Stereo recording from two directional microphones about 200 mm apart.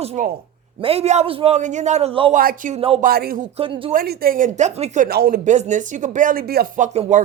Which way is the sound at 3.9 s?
45° right (ahead or behind).